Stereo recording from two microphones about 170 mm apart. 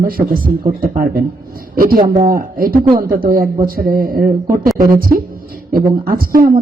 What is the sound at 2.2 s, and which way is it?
A woman's voice, 55° right (ahead or behind).